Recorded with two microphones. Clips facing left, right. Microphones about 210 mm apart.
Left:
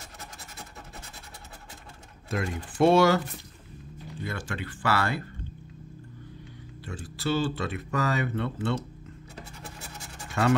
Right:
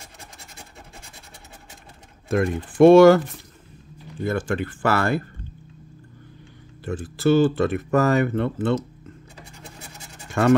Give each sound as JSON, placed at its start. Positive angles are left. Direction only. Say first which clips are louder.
{"t": 2.2, "sound": "speech", "louder": "right 9 dB", "side_deg": -55}
{"t": 4.2, "sound": "speech", "louder": "right 11 dB", "side_deg": -50}
{"t": 6.8, "sound": "speech", "louder": "right 11 dB", "side_deg": -50}